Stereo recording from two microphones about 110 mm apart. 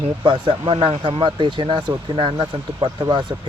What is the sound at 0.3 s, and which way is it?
Speech, 45° right (ahead or behind).